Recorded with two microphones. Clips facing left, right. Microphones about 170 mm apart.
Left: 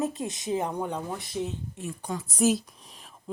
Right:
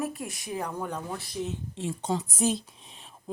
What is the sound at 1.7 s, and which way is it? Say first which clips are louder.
Speech: right 4 dB; 25° right (ahead or behind).